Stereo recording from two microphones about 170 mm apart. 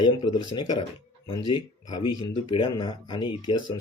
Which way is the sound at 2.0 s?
25° left (ahead or behind).